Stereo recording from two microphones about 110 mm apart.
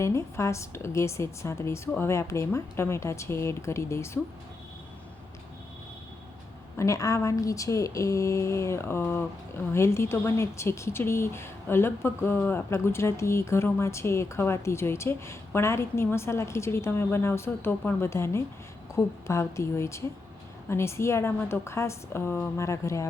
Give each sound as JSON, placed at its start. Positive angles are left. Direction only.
{"t": 0.0, "sound": "speech", "side_deg": 25}
{"t": 6.7, "sound": "speech", "side_deg": 30}